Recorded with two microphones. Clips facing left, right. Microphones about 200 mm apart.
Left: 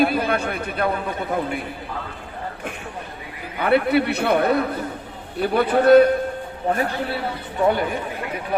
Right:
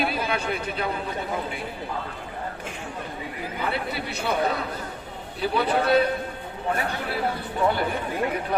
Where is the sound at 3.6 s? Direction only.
60° left (ahead or behind).